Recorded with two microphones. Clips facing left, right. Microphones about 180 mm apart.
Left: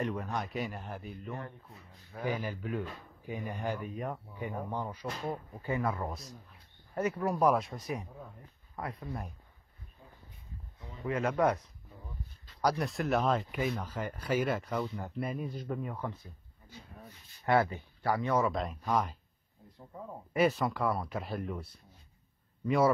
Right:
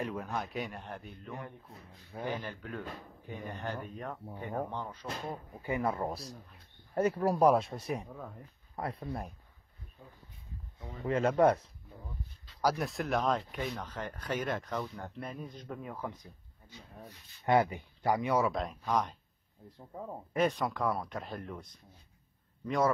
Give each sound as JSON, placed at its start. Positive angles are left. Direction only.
{"t": 0.0, "sound": "speech", "side_deg": 0}
{"t": 1.3, "sound": "speech", "side_deg": -15}
{"t": 2.2, "sound": "speech", "side_deg": 10}
{"t": 5.6, "sound": "speech", "side_deg": -20}
{"t": 11.1, "sound": "speech", "side_deg": -30}
{"t": 12.6, "sound": "speech", "side_deg": 0}
{"t": 17.5, "sound": "speech", "side_deg": -15}
{"t": 18.5, "sound": "speech", "side_deg": 0}
{"t": 20.3, "sound": "speech", "side_deg": 5}